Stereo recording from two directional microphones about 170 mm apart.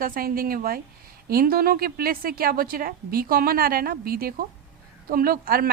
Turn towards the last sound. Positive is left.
turn(degrees=-60)  # may be behind; listen again after turning